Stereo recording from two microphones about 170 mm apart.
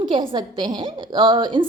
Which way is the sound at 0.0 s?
30° right (ahead or behind).